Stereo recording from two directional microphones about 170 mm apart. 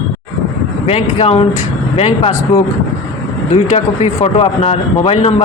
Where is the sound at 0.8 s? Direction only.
35° left (ahead or behind).